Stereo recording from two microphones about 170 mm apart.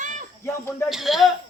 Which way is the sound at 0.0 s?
45° right (ahead or behind).